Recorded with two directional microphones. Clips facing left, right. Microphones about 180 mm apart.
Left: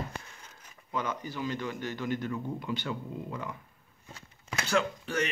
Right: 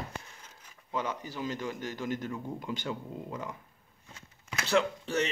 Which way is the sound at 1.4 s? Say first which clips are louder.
Even; 40° right (ahead or behind).